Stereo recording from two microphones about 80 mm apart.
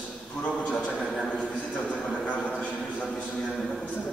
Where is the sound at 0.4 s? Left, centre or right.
Centre.